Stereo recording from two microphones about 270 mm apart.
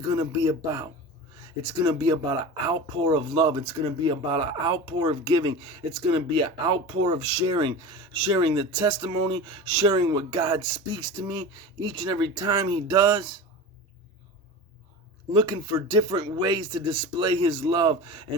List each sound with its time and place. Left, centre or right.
0.1 s speech: centre
15.3 s speech: centre